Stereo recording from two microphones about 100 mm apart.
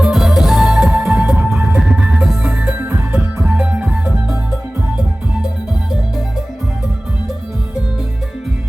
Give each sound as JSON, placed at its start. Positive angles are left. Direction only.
{"t": 0.0, "sound": "music", "side_deg": -5}
{"t": 2.7, "sound": "music", "side_deg": -20}
{"t": 3.4, "sound": "music", "side_deg": -10}